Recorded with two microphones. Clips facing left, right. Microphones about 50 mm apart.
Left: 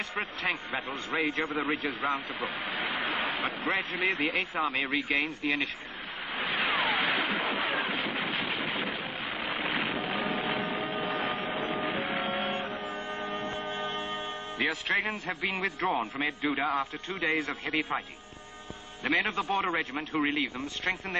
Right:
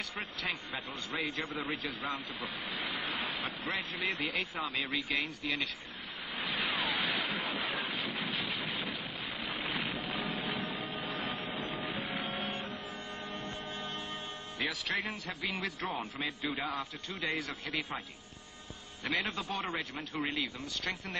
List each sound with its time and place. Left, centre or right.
0.1 s a man's voice: left
3.0 s vehicle: left
3.6 s a man's voice: left
6.3 s vehicle: left
7.2 s a sound: left
8.0 s machine gun: left
10.0 s music: left
10.4 s vehicle: left
12.2 s music: left
16.7 s a man's voice: left
19.0 s a man's voice: left